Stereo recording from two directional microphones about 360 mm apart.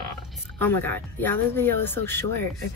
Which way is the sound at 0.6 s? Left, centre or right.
Centre.